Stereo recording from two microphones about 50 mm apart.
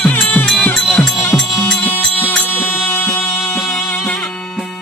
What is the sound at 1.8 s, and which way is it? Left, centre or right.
Music, left.